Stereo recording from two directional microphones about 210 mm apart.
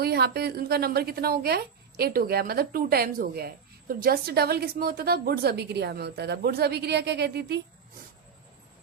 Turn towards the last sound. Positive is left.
turn(degrees=-55)  # may be behind; listen again after turning